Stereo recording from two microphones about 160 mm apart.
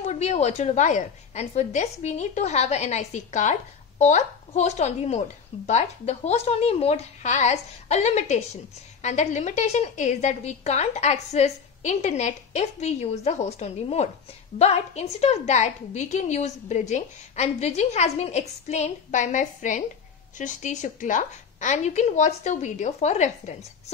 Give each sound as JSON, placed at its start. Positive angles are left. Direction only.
{"t": 0.0, "sound": "a woman's voice", "side_deg": 45}